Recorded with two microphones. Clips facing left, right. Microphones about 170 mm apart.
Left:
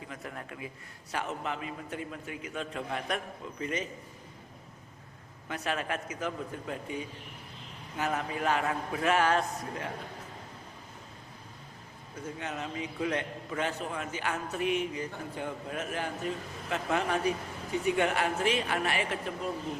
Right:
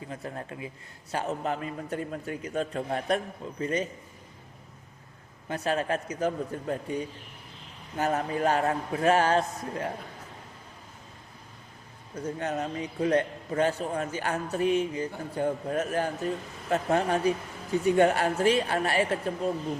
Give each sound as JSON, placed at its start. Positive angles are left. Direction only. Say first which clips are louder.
{"t": 0.1, "sound": "a man's voice", "louder": "right 6 dB", "side_deg": -30}
{"t": 5.5, "sound": "a man's voice", "louder": "right 5 dB", "side_deg": -35}
{"t": 12.4, "sound": "a man's voice", "louder": "right 5 dB", "side_deg": -45}